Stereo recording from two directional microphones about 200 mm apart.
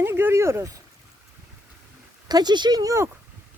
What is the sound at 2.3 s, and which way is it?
Speech, 20° right (ahead or behind).